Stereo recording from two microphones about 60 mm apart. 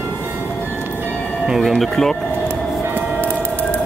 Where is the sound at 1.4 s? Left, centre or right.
Centre.